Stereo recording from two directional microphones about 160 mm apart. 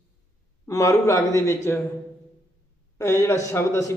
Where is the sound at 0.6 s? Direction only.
20° left (ahead or behind).